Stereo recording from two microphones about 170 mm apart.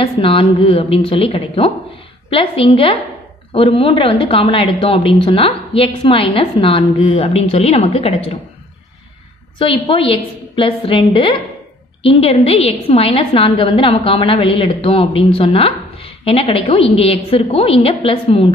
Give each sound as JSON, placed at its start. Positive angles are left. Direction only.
{"t": 0.0, "sound": "a woman's voice", "side_deg": 35}
{"t": 9.6, "sound": "a woman's voice", "side_deg": 30}